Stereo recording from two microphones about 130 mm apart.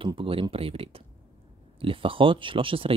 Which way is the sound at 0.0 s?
45° right (ahead or behind).